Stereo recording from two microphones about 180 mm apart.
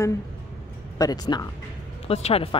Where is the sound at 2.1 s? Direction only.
35° left (ahead or behind).